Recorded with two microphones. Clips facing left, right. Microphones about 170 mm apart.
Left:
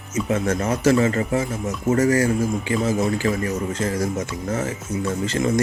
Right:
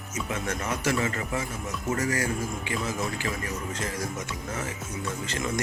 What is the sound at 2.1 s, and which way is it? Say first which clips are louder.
Speech: left 10 dB; 30° left (ahead or behind).